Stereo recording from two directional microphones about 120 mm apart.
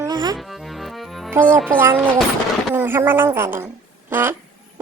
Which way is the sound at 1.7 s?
20° right (ahead or behind).